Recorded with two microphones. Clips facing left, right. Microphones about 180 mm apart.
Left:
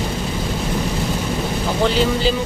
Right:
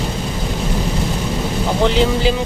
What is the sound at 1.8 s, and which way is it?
Speech, 15° right (ahead or behind).